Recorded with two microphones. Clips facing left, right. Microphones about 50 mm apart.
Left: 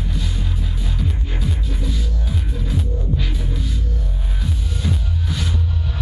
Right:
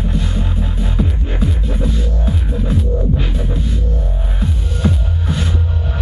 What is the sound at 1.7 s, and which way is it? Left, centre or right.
Music, right.